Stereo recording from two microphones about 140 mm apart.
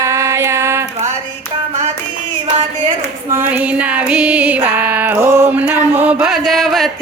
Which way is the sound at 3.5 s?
10° right (ahead or behind).